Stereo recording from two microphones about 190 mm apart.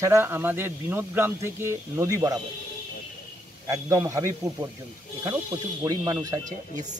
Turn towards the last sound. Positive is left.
turn(degrees=-20)  # may be behind; listen again after turning